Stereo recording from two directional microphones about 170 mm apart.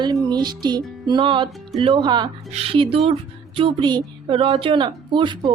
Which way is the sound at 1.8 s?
25° right (ahead or behind).